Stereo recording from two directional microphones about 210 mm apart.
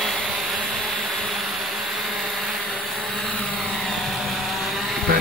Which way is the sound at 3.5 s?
Centre (ahead or behind).